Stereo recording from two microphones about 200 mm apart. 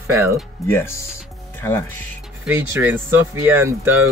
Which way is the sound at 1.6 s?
10° left (ahead or behind).